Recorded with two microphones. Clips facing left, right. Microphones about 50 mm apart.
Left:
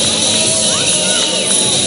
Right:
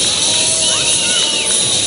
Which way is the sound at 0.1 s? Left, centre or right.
Left.